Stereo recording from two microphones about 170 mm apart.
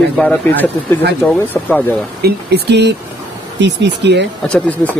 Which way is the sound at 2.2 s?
75° right (ahead or behind).